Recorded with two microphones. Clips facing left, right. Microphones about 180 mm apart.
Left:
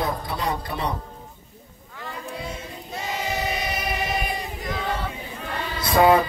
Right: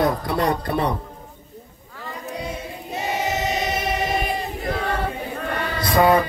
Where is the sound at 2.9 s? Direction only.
20° right (ahead or behind).